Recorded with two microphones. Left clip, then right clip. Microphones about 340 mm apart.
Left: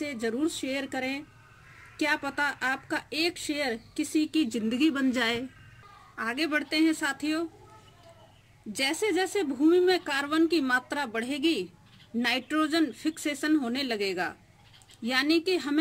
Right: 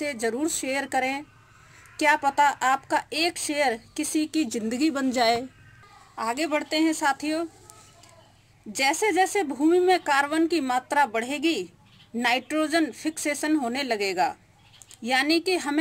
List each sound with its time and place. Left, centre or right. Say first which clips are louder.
0.0 s speech: right 3 dB; centre
2.2 s speech: right 8 dB; centre
8.7 s speech: right 5 dB; centre